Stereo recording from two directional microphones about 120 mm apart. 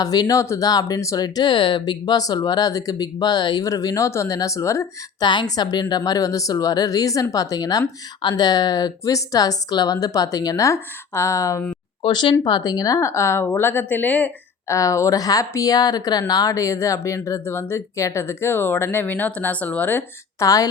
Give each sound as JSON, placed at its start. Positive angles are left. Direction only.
{"t": 0.0, "sound": "a woman's voice", "side_deg": 30}
{"t": 5.2, "sound": "a woman's voice", "side_deg": 40}
{"t": 12.0, "sound": "speech", "side_deg": 40}
{"t": 14.7, "sound": "speech", "side_deg": 25}